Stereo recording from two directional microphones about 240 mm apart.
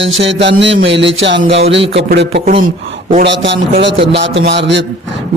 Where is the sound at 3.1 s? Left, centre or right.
Right.